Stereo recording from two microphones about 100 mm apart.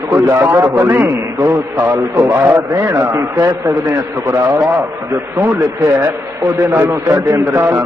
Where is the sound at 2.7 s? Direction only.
30° right (ahead or behind).